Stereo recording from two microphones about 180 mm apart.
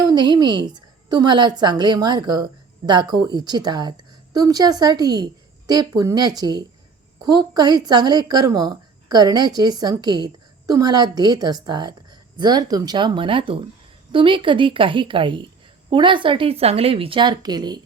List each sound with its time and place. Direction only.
0.0 s a woman's voice: 20° right (ahead or behind)